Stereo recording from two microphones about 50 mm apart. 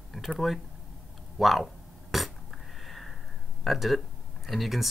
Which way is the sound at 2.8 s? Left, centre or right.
Centre.